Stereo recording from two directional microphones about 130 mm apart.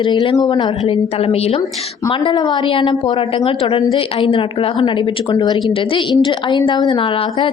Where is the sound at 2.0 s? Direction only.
35° left (ahead or behind).